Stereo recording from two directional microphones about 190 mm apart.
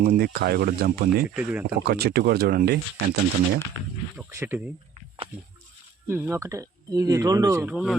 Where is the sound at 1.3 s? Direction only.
5° right (ahead or behind).